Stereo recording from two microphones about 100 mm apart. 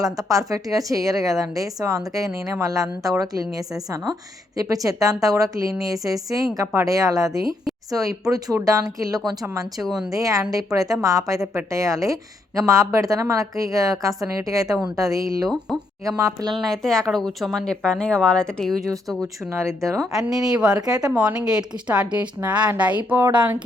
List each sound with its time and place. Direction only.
0.0 s a woman's voice: 35° right (ahead or behind)
4.5 s a woman's voice: 35° right (ahead or behind)
16.5 s speech: 5° left (ahead or behind)
19.5 s speech: 30° right (ahead or behind)
20.2 s speech: 5° right (ahead or behind)